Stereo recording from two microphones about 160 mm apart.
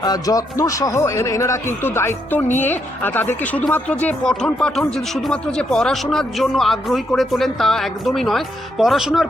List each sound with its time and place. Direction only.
0.0 s a woman's voice: 25° left (ahead or behind); by 9.2 s centre (ahead or behind)